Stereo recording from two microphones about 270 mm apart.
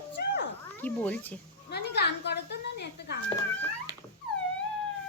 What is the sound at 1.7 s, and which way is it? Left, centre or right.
Speech, left.